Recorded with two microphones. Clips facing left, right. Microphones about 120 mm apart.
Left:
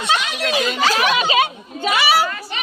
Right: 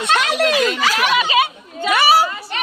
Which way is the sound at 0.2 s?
90° right.